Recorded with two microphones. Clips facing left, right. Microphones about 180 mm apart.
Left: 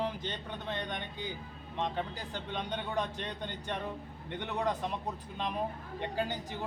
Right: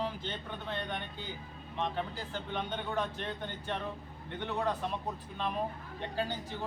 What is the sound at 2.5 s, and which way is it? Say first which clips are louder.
Speech: even; 15° left (ahead or behind).